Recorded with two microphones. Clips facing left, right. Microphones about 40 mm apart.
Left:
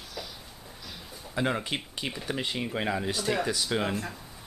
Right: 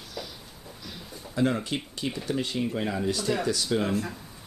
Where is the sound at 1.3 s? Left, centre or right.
Left.